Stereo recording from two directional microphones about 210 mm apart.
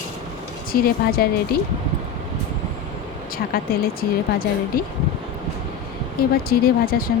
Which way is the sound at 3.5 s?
45° left (ahead or behind).